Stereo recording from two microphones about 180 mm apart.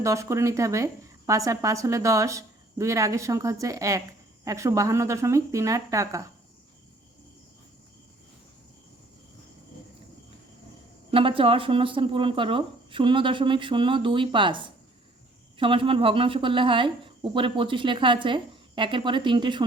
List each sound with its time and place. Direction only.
0.0 s a woman's voice: 15° right (ahead or behind)
11.1 s speech: 30° right (ahead or behind)